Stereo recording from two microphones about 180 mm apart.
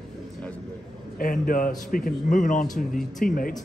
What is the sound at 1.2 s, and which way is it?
Speech, 50° left (ahead or behind).